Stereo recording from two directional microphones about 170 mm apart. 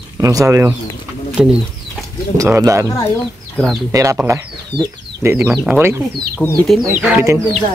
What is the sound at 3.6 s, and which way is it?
Speech, 10° left (ahead or behind).